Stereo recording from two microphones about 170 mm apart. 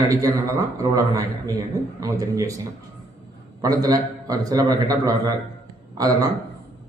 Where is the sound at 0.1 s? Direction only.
20° right (ahead or behind).